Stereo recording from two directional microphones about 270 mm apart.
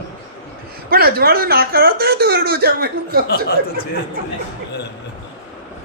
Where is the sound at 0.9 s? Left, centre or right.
Right.